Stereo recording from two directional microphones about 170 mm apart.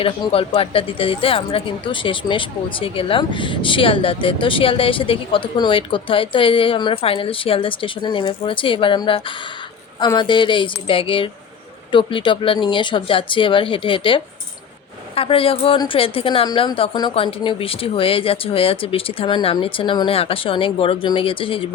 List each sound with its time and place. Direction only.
0.0 s a woman's voice: 35° left (ahead or behind)